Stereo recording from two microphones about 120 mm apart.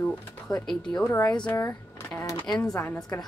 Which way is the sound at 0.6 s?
Centre (ahead or behind).